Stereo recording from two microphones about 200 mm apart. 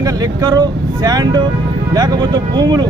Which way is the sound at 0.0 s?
20° right (ahead or behind).